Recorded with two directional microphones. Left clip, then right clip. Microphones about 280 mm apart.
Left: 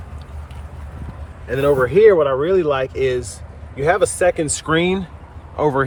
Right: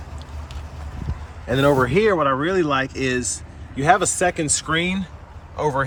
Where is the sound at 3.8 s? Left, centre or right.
Centre.